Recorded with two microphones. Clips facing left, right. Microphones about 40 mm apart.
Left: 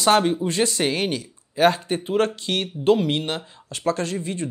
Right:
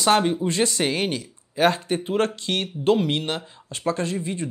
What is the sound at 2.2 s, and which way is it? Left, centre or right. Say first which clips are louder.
Speech: left 1 dB; left.